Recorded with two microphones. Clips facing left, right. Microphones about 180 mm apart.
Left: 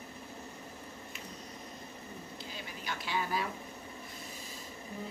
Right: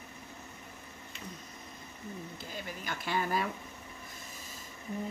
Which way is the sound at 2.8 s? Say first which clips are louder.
Right 2 dB; 50° right (ahead or behind).